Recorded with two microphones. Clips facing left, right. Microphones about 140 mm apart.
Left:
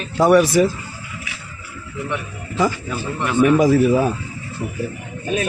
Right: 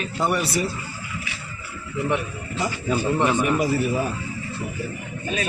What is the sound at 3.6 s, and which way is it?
Speech, 90° left.